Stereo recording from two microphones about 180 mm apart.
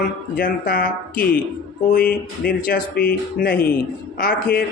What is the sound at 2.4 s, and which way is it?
Speech, 55° left (ahead or behind).